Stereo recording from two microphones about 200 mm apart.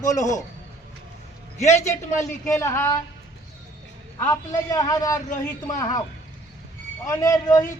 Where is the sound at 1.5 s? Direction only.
35° left (ahead or behind).